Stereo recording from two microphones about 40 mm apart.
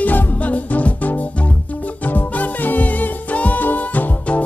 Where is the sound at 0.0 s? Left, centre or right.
Left.